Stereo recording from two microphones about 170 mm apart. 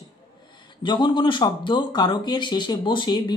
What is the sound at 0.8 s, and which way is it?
Speech, 25° left (ahead or behind).